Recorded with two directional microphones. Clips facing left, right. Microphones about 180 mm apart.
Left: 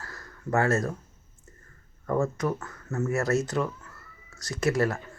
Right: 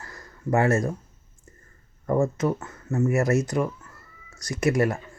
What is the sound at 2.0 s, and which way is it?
Speech, 15° right (ahead or behind).